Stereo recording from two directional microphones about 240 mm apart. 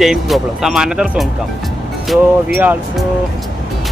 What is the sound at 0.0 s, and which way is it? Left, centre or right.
Speech, centre.